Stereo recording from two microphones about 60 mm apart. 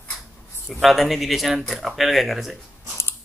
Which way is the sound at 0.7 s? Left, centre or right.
Centre.